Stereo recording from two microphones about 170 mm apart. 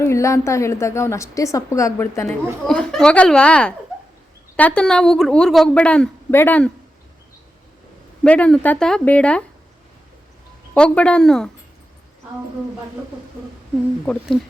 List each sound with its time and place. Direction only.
0.0 s a woman's voice: 15° left (ahead or behind)
2.6 s a woman's voice: 5° left (ahead or behind)
8.2 s a woman's voice: 5° left (ahead or behind)
10.8 s a woman's voice: 5° left (ahead or behind)